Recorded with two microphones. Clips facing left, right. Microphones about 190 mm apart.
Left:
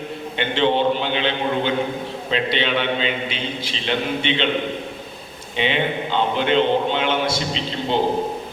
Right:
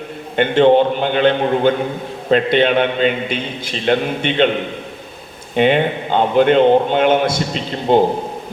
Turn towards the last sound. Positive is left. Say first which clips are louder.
# right 7 dB
turn(degrees=-50)  # may be behind; listen again after turning